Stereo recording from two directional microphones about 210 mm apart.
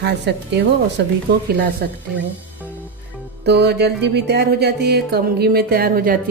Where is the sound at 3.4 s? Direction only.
55° right (ahead or behind).